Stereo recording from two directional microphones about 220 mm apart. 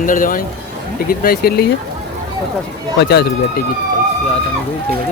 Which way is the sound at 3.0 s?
45° left (ahead or behind).